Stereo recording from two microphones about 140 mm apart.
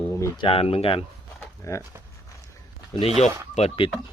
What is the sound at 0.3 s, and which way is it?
Speech, 40° left (ahead or behind).